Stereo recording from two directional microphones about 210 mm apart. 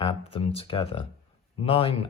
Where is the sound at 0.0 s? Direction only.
25° left (ahead or behind).